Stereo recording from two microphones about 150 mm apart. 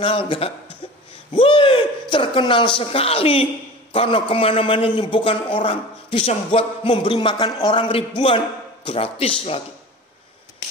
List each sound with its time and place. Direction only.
0.0 s a man's voice: 35° left (ahead or behind)